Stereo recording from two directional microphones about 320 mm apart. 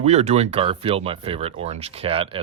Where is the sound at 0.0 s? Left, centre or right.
Centre.